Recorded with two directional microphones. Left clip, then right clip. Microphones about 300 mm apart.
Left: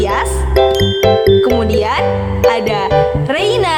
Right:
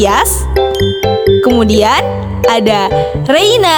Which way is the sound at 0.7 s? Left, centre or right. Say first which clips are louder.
Left 1 dB; centre.